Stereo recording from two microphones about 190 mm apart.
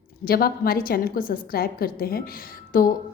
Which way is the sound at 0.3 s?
50° left (ahead or behind).